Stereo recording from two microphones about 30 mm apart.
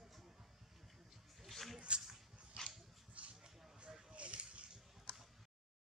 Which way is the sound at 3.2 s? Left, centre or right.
Right.